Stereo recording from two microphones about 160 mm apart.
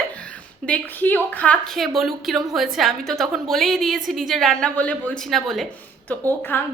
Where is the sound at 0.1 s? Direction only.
10° left (ahead or behind).